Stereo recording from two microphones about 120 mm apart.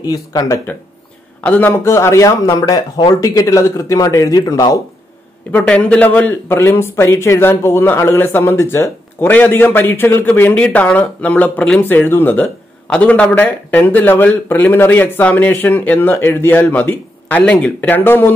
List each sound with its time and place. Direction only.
0.0 s speech: 30° left (ahead or behind)
1.4 s speech: 15° left (ahead or behind); by 4.7 s 30° left (ahead or behind)
5.5 s a man's voice: 10° left (ahead or behind)